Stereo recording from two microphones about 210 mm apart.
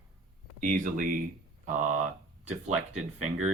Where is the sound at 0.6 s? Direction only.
40° right (ahead or behind).